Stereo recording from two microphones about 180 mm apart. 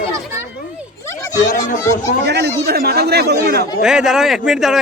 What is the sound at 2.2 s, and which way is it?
Speech, 70° right (ahead or behind).